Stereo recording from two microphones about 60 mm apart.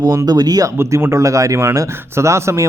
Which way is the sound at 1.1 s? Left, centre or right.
Right.